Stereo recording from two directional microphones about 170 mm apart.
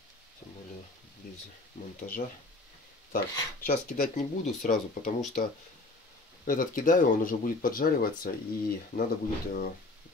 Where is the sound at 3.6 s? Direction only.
55° left (ahead or behind).